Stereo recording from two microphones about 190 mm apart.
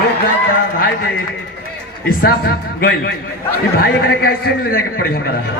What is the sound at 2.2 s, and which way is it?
A man's voice, 55° left (ahead or behind).